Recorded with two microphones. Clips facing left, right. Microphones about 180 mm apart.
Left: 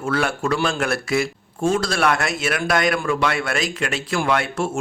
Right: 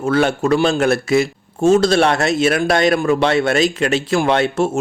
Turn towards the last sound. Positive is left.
turn(degrees=-25)  # may be behind; listen again after turning